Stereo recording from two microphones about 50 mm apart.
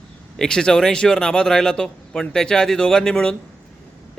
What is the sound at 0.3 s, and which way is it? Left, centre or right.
A man's voice, centre.